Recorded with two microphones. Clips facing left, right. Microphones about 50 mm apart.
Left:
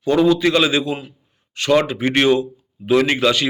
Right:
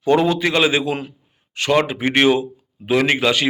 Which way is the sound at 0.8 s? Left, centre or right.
Right.